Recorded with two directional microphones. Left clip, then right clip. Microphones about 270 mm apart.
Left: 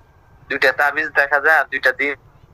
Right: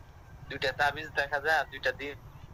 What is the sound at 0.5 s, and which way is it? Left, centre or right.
Speech, left.